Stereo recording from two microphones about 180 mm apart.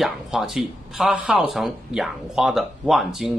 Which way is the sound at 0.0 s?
Centre (ahead or behind).